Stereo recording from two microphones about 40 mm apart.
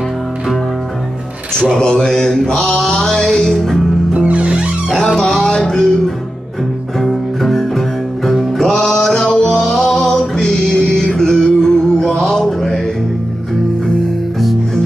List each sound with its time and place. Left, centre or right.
1.8 s mantra: centre
4.1 s music: right
4.9 s music: centre